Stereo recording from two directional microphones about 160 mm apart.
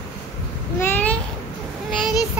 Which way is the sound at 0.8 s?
10° left (ahead or behind).